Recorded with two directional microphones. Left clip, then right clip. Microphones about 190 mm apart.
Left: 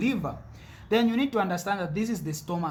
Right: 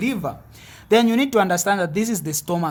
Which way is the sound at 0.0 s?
40° right (ahead or behind).